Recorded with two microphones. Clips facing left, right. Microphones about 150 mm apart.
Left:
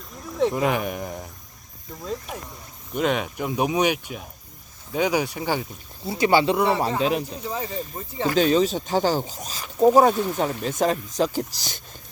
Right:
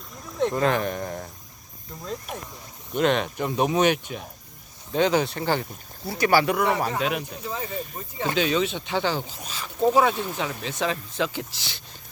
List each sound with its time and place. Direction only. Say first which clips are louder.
0.3 s speech: left 1 dB; centre (ahead or behind)
2.9 s speech: right 1 dB; 5° left (ahead or behind)
6.1 s speech: left 2 dB; 20° left (ahead or behind)
8.4 s speech: left 5 dB; 40° left (ahead or behind)